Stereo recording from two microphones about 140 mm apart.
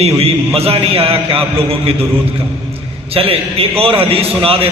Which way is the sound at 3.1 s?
45° right (ahead or behind).